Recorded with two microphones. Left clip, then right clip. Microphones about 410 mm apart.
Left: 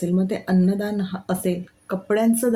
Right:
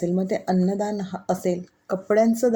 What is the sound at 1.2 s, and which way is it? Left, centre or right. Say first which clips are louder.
Speech: right 3 dB; left.